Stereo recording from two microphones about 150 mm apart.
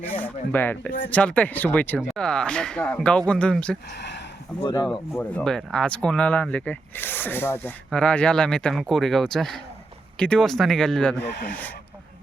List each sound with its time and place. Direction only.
0.1 s speech: 10° left (ahead or behind)
4.6 s speech: 20° left (ahead or behind)
5.1 s speech: 10° left (ahead or behind)